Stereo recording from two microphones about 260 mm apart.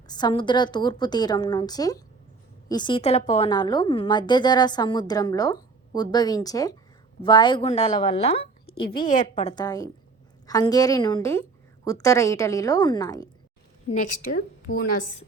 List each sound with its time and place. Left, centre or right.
0.1 s a woman's voice: centre
8.6 s a woman's voice: left; by 13.2 s centre
13.9 s a woman's voice: left